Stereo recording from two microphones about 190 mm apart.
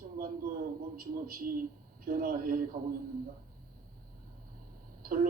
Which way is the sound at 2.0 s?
50° right (ahead or behind).